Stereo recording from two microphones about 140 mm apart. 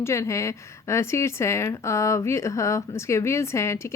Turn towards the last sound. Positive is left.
turn(degrees=20)  # may be behind; listen again after turning